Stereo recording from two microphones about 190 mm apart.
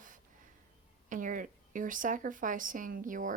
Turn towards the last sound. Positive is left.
turn(degrees=-45)  # may be behind; listen again after turning